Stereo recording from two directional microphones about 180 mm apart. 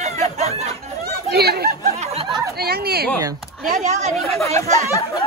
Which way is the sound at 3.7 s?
45° right (ahead or behind).